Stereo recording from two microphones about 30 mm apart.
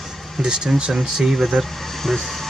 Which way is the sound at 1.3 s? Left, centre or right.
Centre.